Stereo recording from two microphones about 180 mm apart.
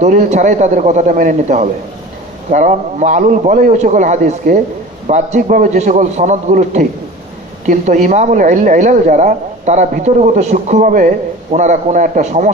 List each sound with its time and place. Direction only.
0.0 s a man's voice: 40° right (ahead or behind)